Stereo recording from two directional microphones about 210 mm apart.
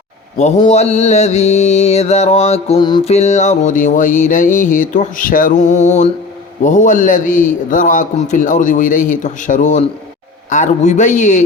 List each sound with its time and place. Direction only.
0.3 s mantra: 30° left (ahead or behind)